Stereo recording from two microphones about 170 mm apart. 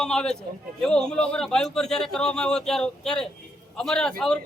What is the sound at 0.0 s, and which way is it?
A man's voice, 5° left (ahead or behind).